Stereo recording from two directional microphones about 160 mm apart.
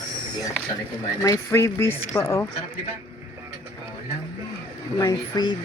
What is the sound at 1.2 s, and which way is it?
Speech, 20° left (ahead or behind).